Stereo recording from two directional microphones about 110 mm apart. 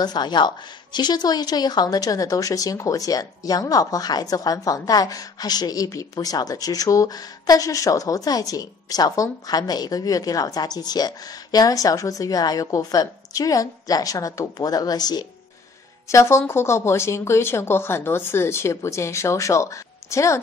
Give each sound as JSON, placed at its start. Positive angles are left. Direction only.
{"t": 0.0, "sound": "a woman's voice", "side_deg": 40}
{"t": 16.1, "sound": "speech", "side_deg": 25}